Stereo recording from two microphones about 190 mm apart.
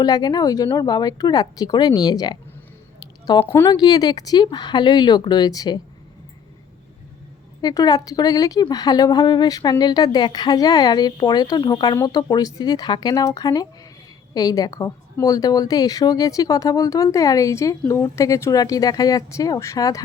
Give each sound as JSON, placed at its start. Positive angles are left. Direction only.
{"t": 0.0, "sound": "speech", "side_deg": 20}
{"t": 3.4, "sound": "speech", "side_deg": 15}
{"t": 7.6, "sound": "a woman's voice", "side_deg": 20}